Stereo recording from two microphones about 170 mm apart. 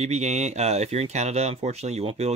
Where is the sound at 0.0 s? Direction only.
40° right (ahead or behind).